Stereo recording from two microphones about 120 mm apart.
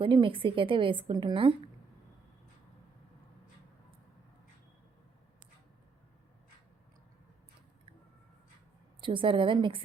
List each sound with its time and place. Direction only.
0.0 s a woman's voice: 45° right (ahead or behind)
9.0 s a woman's voice: 45° right (ahead or behind)